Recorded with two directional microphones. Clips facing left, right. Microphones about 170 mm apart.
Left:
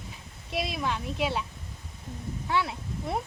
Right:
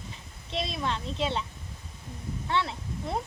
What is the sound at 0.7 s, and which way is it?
Speech, 5° left (ahead or behind).